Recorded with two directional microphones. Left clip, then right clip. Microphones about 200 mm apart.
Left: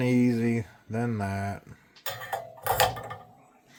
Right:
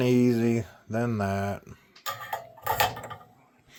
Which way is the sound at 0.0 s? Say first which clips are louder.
Right 2 dB; 10° right (ahead or behind).